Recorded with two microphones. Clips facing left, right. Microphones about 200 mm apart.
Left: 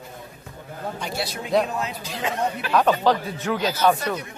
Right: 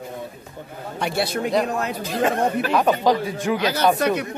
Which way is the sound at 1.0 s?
60° right (ahead or behind).